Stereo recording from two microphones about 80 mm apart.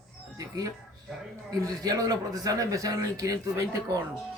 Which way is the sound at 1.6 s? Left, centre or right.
Right.